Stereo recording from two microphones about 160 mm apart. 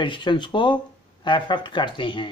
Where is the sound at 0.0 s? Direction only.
30° left (ahead or behind).